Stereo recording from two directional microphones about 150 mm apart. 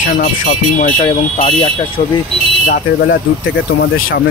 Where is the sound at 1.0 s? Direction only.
40° left (ahead or behind).